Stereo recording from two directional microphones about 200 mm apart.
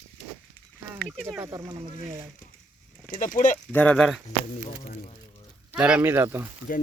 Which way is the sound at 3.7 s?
5° left (ahead or behind).